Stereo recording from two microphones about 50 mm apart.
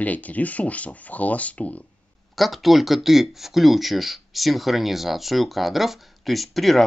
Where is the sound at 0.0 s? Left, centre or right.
Left.